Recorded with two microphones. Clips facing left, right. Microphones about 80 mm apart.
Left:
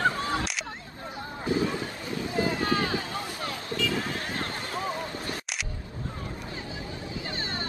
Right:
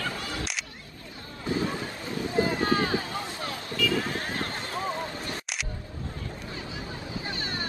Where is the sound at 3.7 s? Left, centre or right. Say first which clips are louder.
Right 2 dB; left.